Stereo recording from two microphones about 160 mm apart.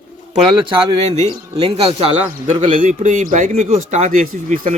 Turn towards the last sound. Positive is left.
turn(degrees=-55)  # may be behind; listen again after turning